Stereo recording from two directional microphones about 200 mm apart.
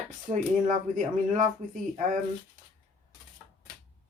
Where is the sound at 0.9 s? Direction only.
40° right (ahead or behind).